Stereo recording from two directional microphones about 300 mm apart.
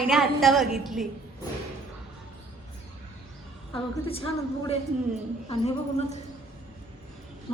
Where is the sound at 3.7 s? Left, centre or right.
Centre.